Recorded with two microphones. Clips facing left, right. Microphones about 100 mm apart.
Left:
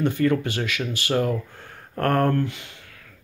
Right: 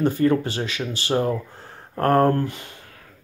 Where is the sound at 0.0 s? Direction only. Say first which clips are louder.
Right 2 dB; 35° right (ahead or behind).